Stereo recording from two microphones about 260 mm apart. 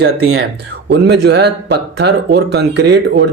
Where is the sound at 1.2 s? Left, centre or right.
Right.